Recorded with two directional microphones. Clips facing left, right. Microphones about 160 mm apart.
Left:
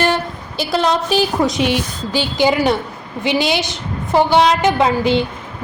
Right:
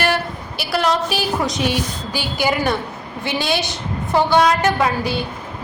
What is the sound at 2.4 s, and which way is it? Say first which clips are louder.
A woman's voice: left 4 dB; 20° left (ahead or behind).